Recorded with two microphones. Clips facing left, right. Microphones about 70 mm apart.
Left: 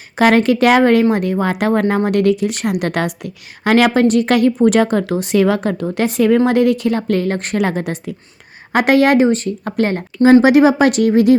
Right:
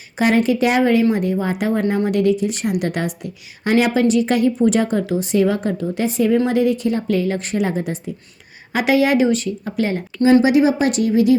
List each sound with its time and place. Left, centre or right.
0.2 s a woman's voice: left
4.0 s a woman's voice: left
7.1 s a woman's voice: left
8.7 s a woman's voice: left
10.4 s a woman's voice: left